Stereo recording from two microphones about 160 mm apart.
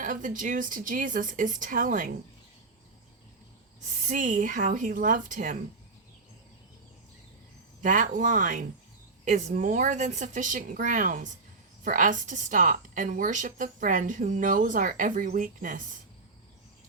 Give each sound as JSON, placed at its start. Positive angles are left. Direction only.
{"t": 0.0, "sound": "a woman's voice", "side_deg": -55}
{"t": 4.0, "sound": "a woman's voice", "side_deg": -50}
{"t": 7.8, "sound": "a woman's voice", "side_deg": -55}